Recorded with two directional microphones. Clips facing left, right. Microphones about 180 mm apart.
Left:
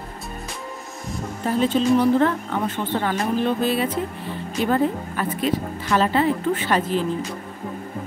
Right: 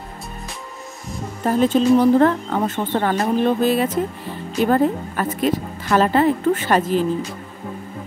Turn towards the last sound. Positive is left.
turn(degrees=-45)  # may be behind; listen again after turning